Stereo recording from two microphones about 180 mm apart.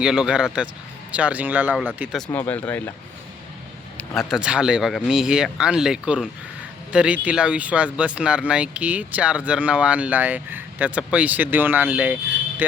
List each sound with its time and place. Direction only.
0.0 s speech: 5° right (ahead or behind)
2.1 s speech: 5° left (ahead or behind)
3.9 s speech: centre (ahead or behind)